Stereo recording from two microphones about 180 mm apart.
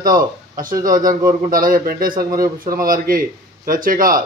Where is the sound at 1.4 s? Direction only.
50° right (ahead or behind).